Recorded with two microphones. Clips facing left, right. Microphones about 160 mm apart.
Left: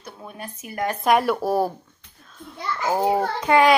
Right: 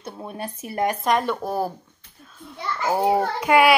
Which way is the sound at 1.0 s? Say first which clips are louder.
Left 3 dB; 5° left (ahead or behind).